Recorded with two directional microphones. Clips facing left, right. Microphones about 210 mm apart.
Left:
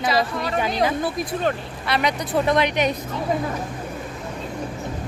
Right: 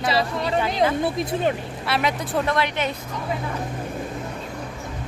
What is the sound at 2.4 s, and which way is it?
Speech, 15° left (ahead or behind).